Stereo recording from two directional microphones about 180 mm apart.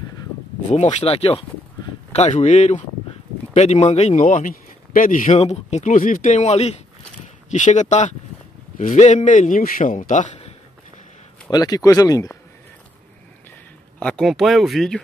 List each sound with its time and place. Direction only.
0.7 s a man's voice: 40° left (ahead or behind)
11.5 s speech: 20° left (ahead or behind)
13.9 s speech: 5° left (ahead or behind)